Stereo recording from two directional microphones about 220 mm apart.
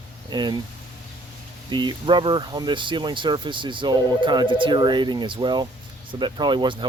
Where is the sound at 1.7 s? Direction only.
20° right (ahead or behind).